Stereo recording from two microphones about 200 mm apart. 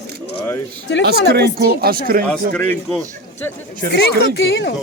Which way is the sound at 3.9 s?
55° left (ahead or behind).